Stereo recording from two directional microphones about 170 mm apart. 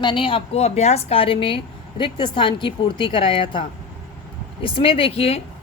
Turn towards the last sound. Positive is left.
turn(degrees=35)  # may be behind; listen again after turning